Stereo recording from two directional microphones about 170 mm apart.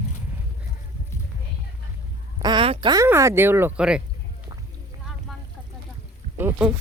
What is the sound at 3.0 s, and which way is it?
Speech, 15° right (ahead or behind).